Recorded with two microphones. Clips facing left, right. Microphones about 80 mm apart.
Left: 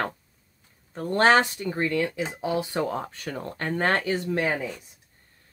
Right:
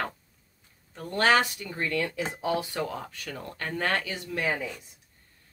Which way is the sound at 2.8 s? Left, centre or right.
Left.